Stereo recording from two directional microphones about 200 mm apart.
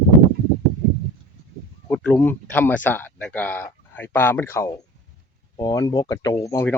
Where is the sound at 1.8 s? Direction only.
5° left (ahead or behind).